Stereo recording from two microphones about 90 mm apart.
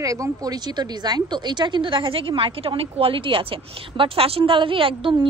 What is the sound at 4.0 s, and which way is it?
A woman's voice, 90° right.